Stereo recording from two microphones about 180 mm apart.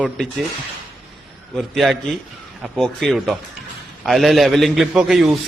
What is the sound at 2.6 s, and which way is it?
A man's voice, centre (ahead or behind).